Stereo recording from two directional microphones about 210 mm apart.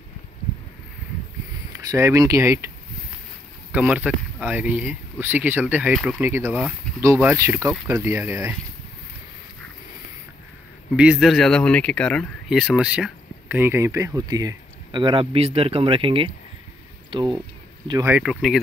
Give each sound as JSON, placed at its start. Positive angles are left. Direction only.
{"t": 1.9, "sound": "speech", "side_deg": -15}
{"t": 3.7, "sound": "speech", "side_deg": -5}
{"t": 11.0, "sound": "speech", "side_deg": -5}